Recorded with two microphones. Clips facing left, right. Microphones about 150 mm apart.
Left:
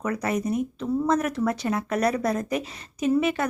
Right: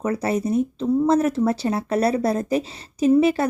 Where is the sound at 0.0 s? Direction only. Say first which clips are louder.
Right 4 dB; 30° right (ahead or behind).